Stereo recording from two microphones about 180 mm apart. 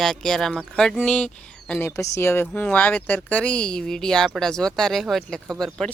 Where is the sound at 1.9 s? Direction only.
15° left (ahead or behind).